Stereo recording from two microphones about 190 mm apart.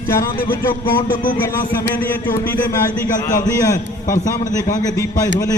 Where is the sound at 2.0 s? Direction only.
10° left (ahead or behind).